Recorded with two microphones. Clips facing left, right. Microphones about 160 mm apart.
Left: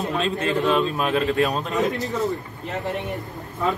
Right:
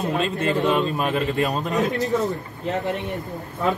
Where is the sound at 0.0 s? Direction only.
Centre (ahead or behind).